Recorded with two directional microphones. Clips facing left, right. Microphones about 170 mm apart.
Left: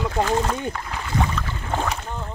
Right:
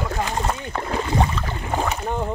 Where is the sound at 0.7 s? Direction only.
35° right (ahead or behind).